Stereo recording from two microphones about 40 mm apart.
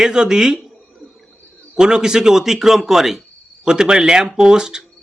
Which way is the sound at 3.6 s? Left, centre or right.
Centre.